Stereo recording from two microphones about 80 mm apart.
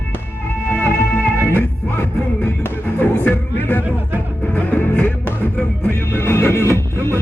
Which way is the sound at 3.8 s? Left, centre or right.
Right.